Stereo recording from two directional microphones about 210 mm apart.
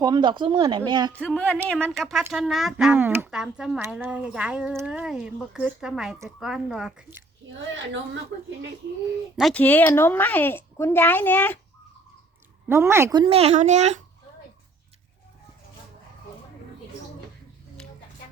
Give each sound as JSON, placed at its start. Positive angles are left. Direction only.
{"t": 0.0, "sound": "a child's voice", "side_deg": -20}
{"t": 1.2, "sound": "speech", "side_deg": 5}
{"t": 9.3, "sound": "a woman's voice", "side_deg": 0}
{"t": 12.6, "sound": "a child's voice", "side_deg": -10}